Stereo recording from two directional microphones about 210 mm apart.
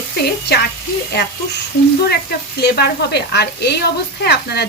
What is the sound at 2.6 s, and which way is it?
Speech, 50° left (ahead or behind).